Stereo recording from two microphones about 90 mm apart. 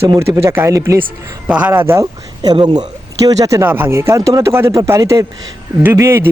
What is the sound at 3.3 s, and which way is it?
Speech, 35° right (ahead or behind).